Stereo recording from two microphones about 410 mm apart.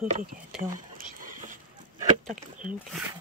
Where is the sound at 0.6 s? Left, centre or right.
Centre.